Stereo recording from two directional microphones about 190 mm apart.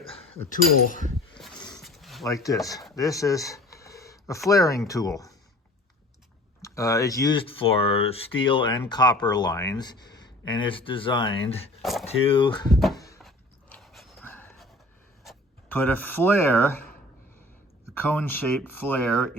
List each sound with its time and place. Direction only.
1.4 s a sound: centre (ahead or behind)
2.2 s speech: 15° left (ahead or behind)
2.9 s a sound: 15° left (ahead or behind)
4.4 s speech: 15° left (ahead or behind)
6.6 s speech: 15° left (ahead or behind)
11.8 s a sound: centre (ahead or behind)
12.0 s speech: 25° left (ahead or behind)
12.7 s cupboard open or close: centre (ahead or behind)
13.1 s dog: centre (ahead or behind)
15.7 s speech: 10° left (ahead or behind)
17.9 s speech: 10° left (ahead or behind)